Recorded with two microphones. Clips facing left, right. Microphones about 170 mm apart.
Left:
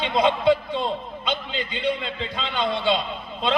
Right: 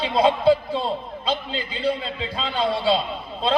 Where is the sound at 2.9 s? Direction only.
35° right (ahead or behind).